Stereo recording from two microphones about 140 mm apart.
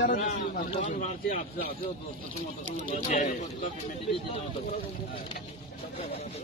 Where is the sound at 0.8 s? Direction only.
65° left (ahead or behind).